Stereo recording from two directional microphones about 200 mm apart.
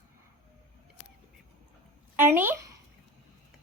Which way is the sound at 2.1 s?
10° right (ahead or behind).